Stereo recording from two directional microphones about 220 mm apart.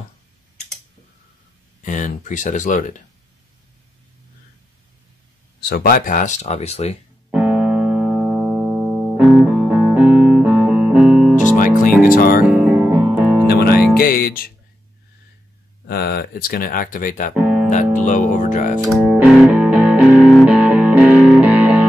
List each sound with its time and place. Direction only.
1.9 s speech: 35° left (ahead or behind)
5.7 s speech: 40° left (ahead or behind)
7.2 s keyboard: 5° right (ahead or behind)
11.5 s music: 40° left (ahead or behind)
12.4 s music: 5° right (ahead or behind)
13.5 s music: 45° left (ahead or behind)
15.9 s speech: 45° left (ahead or behind)
18.9 s music: centre (ahead or behind)